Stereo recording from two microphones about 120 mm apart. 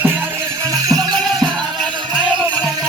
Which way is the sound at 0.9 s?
30° right (ahead or behind).